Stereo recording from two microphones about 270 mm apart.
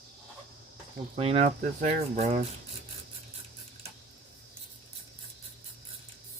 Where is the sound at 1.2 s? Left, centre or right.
Right.